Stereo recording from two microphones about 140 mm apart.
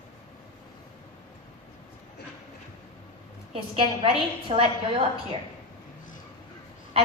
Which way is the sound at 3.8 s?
40° right (ahead or behind).